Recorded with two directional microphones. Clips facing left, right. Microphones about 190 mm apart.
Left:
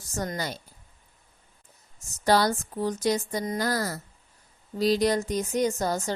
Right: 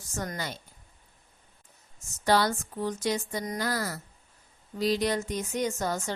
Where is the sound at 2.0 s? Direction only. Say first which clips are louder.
Left 2 dB; 40° left (ahead or behind).